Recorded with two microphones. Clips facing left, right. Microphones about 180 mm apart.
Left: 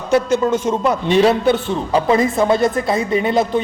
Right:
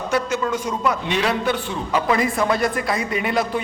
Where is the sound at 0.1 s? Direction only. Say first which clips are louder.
Left 8 dB; 30° left (ahead or behind).